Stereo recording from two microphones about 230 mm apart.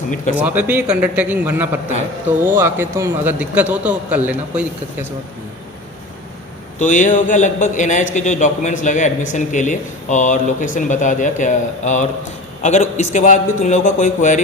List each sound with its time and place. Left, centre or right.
0.3 s a man's voice: centre
6.7 s a man's voice: left